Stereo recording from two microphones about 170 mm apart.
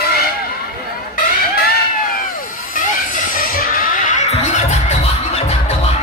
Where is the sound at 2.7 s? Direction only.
55° left (ahead or behind).